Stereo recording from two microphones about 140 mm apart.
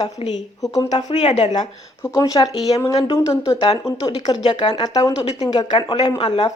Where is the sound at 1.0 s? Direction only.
50° left (ahead or behind); by 1.6 s 35° left (ahead or behind).